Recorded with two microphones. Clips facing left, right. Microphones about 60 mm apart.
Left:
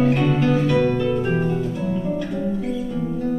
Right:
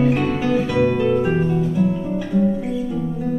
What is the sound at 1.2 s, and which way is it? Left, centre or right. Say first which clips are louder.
Music: right 2 dB; centre.